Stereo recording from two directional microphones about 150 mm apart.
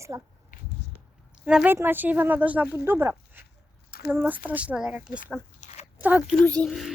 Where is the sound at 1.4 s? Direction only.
5° right (ahead or behind).